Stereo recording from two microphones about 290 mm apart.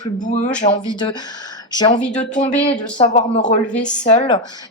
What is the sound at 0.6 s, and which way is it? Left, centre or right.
A woman's voice, left.